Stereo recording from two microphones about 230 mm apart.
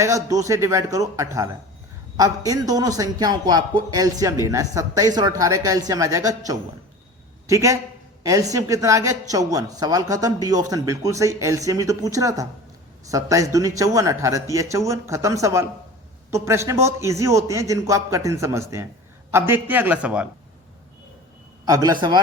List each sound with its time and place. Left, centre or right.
0.0 s a woman's voice: centre
21.7 s a woman's voice: centre